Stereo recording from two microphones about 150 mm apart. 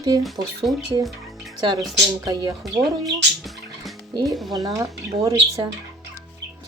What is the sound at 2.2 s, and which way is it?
Speech, 25° right (ahead or behind).